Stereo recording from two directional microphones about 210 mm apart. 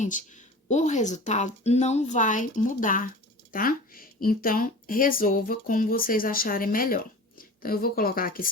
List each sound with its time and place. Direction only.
0.0 s a woman's voice: 35° left (ahead or behind)